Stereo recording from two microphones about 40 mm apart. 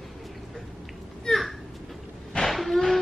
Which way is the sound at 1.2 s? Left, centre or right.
Centre.